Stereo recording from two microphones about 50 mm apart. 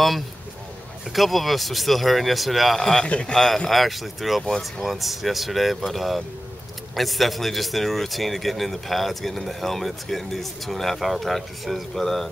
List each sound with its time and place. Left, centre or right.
1.1 s speech: centre
2.8 s a man's voice: centre
3.1 s a man's voice: left
3.3 s speech: centre